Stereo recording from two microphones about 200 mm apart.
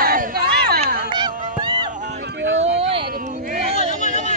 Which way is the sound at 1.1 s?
20° right (ahead or behind).